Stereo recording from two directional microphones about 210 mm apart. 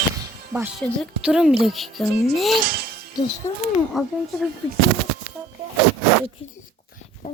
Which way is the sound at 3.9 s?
Centre (ahead or behind).